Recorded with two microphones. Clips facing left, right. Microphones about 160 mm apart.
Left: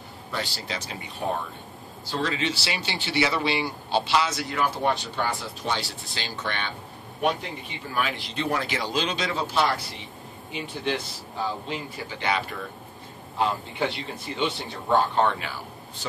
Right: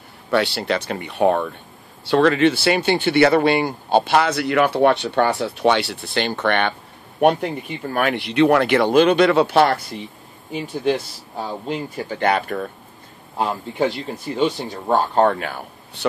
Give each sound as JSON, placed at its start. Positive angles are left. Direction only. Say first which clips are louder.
{"t": 0.3, "sound": "speech", "louder": "right 13 dB", "side_deg": -65}
{"t": 7.9, "sound": "speech", "louder": "right 8 dB", "side_deg": -60}
{"t": 10.5, "sound": "speech", "louder": "right 8 dB", "side_deg": -45}